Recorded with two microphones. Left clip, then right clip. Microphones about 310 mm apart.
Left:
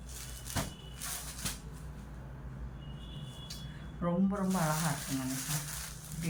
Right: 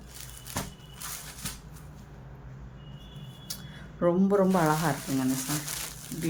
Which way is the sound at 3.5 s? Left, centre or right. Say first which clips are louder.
Right 8 dB; centre.